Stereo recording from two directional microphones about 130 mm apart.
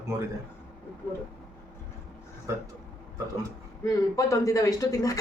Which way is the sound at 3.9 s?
25° left (ahead or behind).